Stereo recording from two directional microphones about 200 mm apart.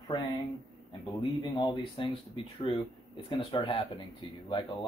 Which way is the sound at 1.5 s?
20° left (ahead or behind).